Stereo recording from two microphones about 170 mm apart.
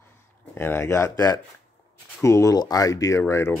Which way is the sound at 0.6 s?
15° left (ahead or behind).